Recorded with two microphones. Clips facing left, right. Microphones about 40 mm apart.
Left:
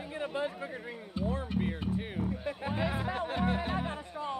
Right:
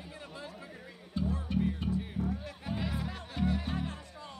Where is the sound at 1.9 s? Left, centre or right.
Left.